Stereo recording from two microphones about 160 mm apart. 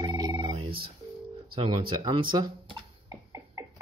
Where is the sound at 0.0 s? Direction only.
25° right (ahead or behind).